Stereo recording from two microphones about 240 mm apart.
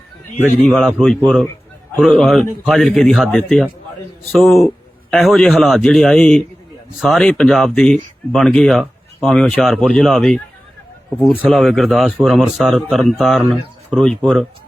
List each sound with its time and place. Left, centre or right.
0.7 s speech: centre
11.4 s speech: centre